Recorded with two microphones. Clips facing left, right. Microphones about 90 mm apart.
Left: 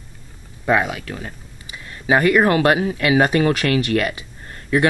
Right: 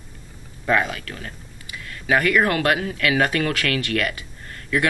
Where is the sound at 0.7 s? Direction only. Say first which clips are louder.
Left 3 dB; 10° left (ahead or behind).